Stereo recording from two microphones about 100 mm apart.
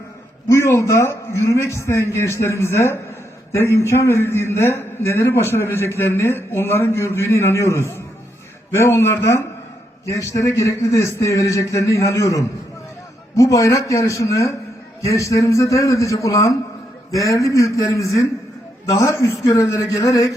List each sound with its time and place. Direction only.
0.4 s a man's voice: 25° left (ahead or behind)